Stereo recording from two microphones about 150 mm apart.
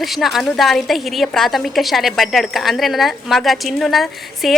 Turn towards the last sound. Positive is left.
turn(degrees=0)  # may be behind; listen again after turning